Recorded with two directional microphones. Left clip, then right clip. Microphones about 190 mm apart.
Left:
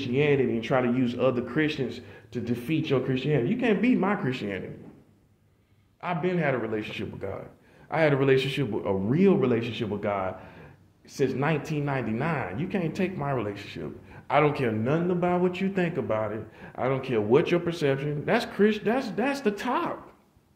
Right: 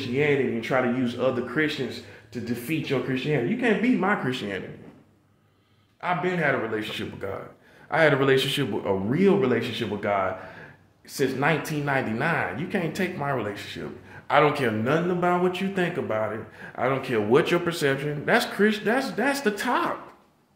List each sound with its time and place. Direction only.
0.0 s speech: 10° right (ahead or behind)
5.9 s speech: 15° right (ahead or behind)